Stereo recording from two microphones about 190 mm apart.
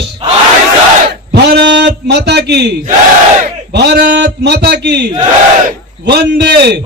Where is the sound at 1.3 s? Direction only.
60° right (ahead or behind).